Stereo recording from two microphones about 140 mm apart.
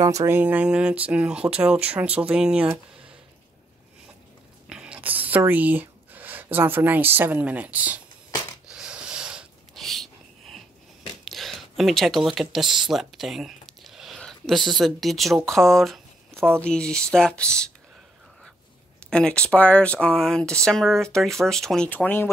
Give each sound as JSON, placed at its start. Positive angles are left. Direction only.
{"t": 0.0, "sound": "speech", "side_deg": -20}
{"t": 4.6, "sound": "speech", "side_deg": -5}
{"t": 8.6, "sound": "a sound", "side_deg": -5}
{"t": 11.2, "sound": "a sound", "side_deg": 0}
{"t": 14.7, "sound": "speech", "side_deg": 0}
{"t": 16.3, "sound": "speech", "side_deg": -20}
{"t": 16.6, "sound": "speech", "side_deg": 5}
{"t": 19.0, "sound": "speech", "side_deg": 5}